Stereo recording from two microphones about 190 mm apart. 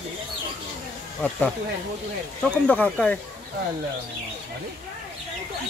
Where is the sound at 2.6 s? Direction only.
5° left (ahead or behind).